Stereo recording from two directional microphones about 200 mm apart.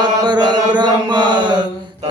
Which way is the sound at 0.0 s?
20° right (ahead or behind).